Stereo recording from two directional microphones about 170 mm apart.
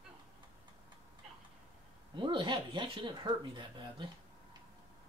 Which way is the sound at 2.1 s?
30° right (ahead or behind).